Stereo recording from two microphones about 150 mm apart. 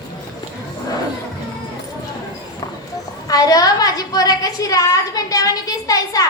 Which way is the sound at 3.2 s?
25° left (ahead or behind).